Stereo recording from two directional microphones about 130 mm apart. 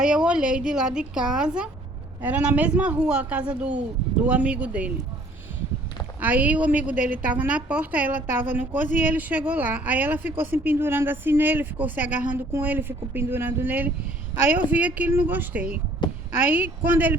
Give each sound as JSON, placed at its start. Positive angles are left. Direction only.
{"t": 0.0, "sound": "speech", "side_deg": -5}
{"t": 6.1, "sound": "speech", "side_deg": -10}
{"t": 16.0, "sound": "a sound", "side_deg": 35}
{"t": 16.4, "sound": "speech", "side_deg": -15}